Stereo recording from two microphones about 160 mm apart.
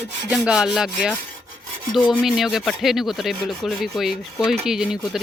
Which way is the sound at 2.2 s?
Centre (ahead or behind).